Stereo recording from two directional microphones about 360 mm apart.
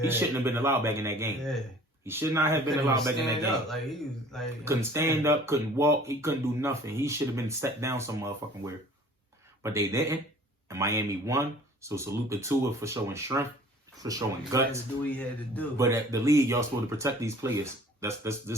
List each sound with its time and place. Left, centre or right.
0.1 s speech: centre
15.1 s speech: centre
15.8 s speech: centre